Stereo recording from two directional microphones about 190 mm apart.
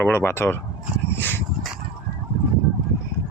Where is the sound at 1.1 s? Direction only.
10° left (ahead or behind).